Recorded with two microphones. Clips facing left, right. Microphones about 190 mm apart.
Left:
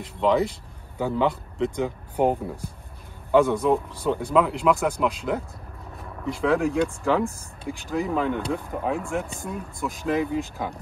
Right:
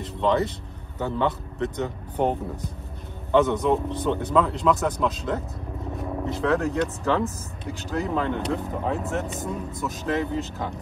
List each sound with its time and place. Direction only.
0.2 s a man's voice: 5° left (ahead or behind)
5.9 s a man's voice: centre (ahead or behind)
9.4 s speech: 20° right (ahead or behind)
10.0 s speech: 5° left (ahead or behind)